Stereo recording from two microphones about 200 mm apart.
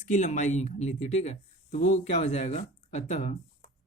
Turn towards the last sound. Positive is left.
turn(degrees=35)  # may be behind; listen again after turning